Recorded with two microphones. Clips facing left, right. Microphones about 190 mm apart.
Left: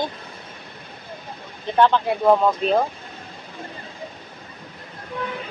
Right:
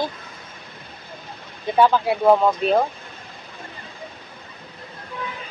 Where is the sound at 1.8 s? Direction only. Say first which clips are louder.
Right 1 dB; 5° right (ahead or behind).